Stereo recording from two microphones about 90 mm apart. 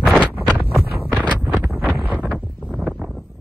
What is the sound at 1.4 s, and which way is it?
Wind noise, 15° right (ahead or behind).